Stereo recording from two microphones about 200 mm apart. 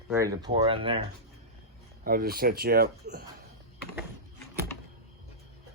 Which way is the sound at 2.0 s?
45° right (ahead or behind).